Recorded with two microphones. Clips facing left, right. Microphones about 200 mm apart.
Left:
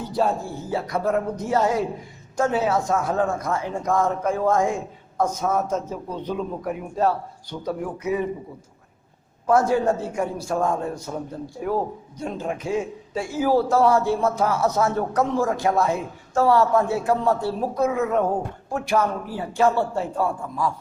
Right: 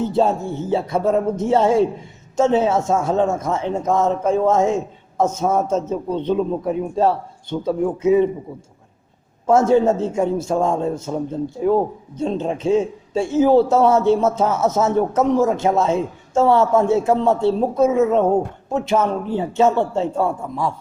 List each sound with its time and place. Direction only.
0.0 s a man's voice: 25° right (ahead or behind)
9.5 s a man's voice: 25° right (ahead or behind)